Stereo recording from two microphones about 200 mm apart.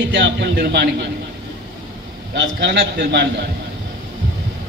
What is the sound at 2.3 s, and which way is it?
Speech, 60° right (ahead or behind).